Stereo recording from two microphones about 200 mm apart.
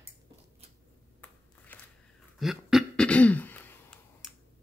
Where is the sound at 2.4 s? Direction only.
Centre (ahead or behind).